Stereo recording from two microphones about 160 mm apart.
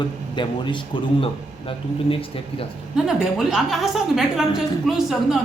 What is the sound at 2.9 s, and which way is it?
A woman's voice, centre (ahead or behind).